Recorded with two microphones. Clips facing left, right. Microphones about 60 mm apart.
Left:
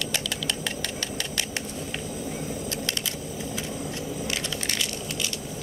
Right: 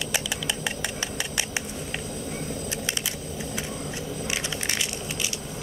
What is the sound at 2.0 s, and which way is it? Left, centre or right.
Vehicle, centre.